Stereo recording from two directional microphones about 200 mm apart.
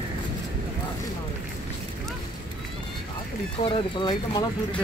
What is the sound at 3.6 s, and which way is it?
Speech, 25° left (ahead or behind).